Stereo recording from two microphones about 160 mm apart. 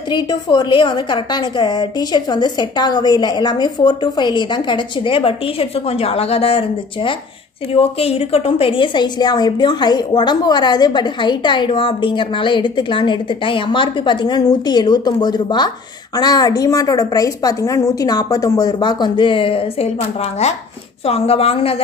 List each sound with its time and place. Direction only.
0.1 s a woman's voice: 25° left (ahead or behind)
7.7 s a woman's voice: 35° left (ahead or behind)
21.0 s a woman's voice: 40° left (ahead or behind)